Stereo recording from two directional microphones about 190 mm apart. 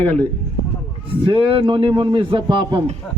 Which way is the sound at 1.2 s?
30° right (ahead or behind).